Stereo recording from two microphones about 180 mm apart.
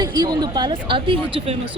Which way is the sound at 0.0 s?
25° right (ahead or behind).